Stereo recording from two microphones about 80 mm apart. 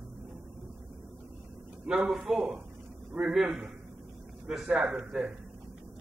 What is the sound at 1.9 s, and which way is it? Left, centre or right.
Speech, centre.